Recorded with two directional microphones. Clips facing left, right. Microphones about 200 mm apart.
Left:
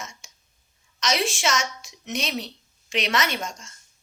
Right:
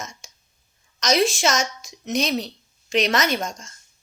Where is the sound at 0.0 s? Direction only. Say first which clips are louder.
Right 3 dB; 40° right (ahead or behind).